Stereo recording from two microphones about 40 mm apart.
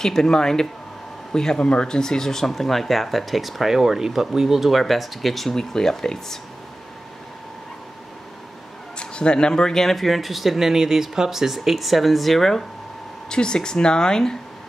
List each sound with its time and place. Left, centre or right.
0.0 s speech: centre
9.0 s speech: left; by 12.6 s centre
13.3 s speech: centre